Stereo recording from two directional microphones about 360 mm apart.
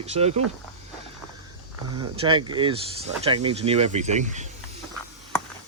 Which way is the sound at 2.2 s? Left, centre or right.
Centre.